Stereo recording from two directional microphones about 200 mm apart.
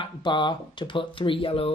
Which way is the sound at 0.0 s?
20° left (ahead or behind).